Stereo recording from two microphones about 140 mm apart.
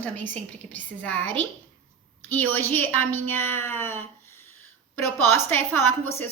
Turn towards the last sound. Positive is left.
turn(degrees=15)  # may be behind; listen again after turning